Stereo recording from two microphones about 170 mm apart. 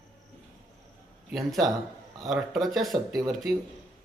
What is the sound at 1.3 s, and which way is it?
Speech, centre (ahead or behind).